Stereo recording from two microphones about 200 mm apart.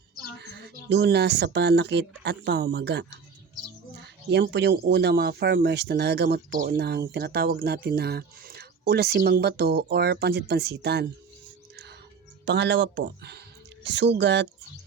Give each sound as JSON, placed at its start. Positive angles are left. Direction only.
{"t": 0.4, "sound": "speech", "side_deg": -55}
{"t": 12.5, "sound": "speech", "side_deg": -60}